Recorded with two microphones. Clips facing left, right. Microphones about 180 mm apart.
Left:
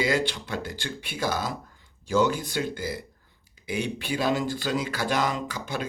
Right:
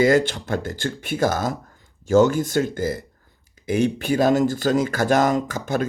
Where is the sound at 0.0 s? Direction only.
50° right (ahead or behind).